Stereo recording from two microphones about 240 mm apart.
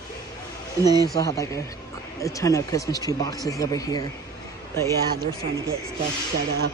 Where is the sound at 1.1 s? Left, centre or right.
Centre.